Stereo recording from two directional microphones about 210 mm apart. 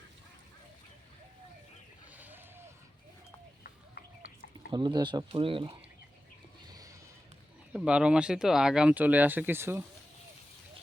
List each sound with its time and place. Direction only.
2.1 s vehicle: 10° right (ahead or behind)
4.7 s speech: 20° right (ahead or behind)
6.7 s a sound: 15° right (ahead or behind)
7.7 s speech: 5° right (ahead or behind)